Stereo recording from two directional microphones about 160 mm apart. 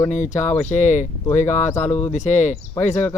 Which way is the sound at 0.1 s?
50° left (ahead or behind).